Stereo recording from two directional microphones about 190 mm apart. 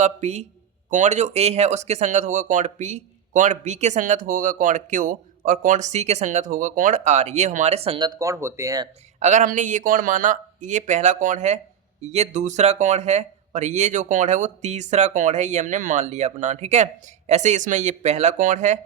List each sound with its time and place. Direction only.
0.0 s speech: 35° right (ahead or behind); by 8.9 s 15° right (ahead or behind)
9.2 s speech: 40° right (ahead or behind)